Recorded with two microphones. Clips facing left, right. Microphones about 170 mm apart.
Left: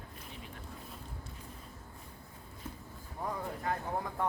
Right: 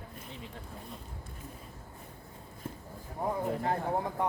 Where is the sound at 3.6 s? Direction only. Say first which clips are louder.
Right 5 dB; 30° right (ahead or behind).